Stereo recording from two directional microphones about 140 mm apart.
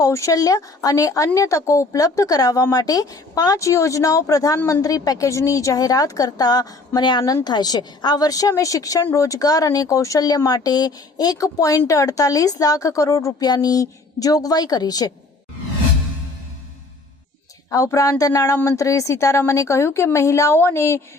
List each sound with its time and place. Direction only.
0.0 s a woman's voice: 25° left (ahead or behind)
17.7 s a woman's voice: 25° left (ahead or behind)